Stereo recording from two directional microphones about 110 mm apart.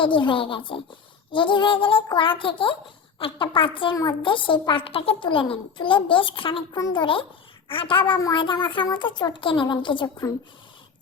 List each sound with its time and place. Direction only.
0.0 s a woman's voice: 50° left (ahead or behind)